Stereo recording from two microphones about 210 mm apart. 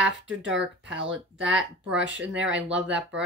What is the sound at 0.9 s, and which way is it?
Speech, 60° right (ahead or behind).